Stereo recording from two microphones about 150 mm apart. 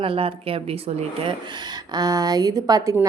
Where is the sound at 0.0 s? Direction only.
35° right (ahead or behind).